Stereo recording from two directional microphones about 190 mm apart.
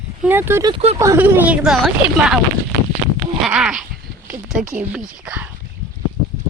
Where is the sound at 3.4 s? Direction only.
5° right (ahead or behind).